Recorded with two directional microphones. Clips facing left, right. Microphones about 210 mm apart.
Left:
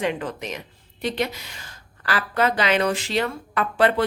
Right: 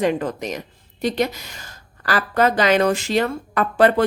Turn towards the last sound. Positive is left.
turn(degrees=-45)  # may be behind; listen again after turning